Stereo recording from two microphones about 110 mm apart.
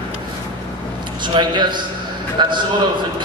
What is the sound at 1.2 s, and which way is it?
A man's voice, 45° right (ahead or behind).